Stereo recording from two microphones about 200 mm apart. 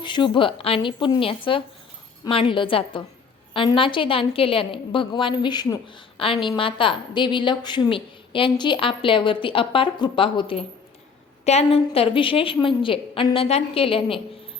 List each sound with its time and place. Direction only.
0.0 s a woman's voice: 25° left (ahead or behind)